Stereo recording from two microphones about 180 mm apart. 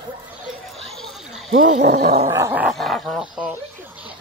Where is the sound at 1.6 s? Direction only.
45° right (ahead or behind).